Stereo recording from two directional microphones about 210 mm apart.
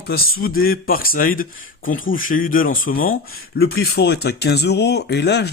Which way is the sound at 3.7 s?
55° left (ahead or behind).